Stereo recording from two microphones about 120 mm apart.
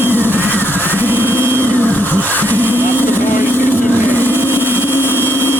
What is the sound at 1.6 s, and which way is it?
Vehicle, 15° left (ahead or behind).